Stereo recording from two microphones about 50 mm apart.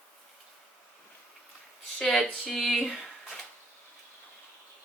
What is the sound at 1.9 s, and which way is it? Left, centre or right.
Speech, centre.